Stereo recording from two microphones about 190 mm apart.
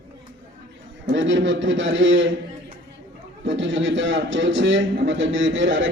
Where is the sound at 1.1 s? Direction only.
75° right (ahead or behind).